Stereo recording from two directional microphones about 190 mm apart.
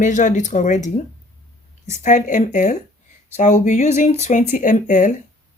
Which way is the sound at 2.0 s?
40° left (ahead or behind).